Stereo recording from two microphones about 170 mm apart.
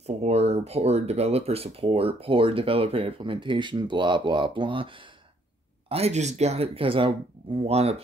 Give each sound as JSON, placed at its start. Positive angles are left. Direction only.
{"t": 0.0, "sound": "speech", "side_deg": -40}